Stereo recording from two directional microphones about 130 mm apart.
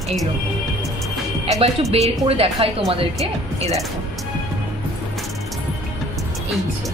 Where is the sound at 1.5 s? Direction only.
50° right (ahead or behind).